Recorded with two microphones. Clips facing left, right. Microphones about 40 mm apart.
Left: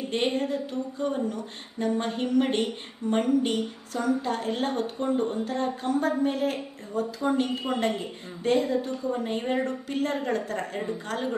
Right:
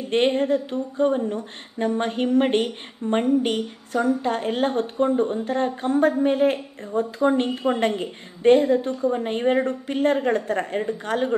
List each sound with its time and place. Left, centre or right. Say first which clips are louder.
0.1 s speech: right 8 dB; right